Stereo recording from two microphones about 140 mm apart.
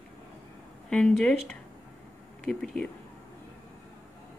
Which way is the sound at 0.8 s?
5° left (ahead or behind).